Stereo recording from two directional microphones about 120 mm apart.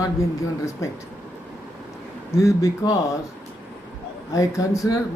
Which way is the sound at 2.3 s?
25° left (ahead or behind).